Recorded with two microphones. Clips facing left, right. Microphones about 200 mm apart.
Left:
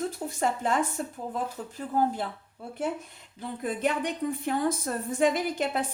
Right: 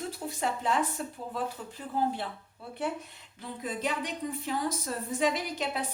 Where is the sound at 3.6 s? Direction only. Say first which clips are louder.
Left 5 dB; 55° left (ahead or behind).